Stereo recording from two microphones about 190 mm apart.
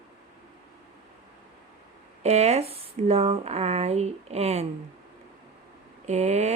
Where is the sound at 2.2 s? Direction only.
35° right (ahead or behind).